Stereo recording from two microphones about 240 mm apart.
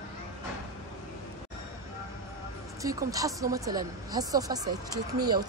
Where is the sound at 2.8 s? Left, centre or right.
Centre.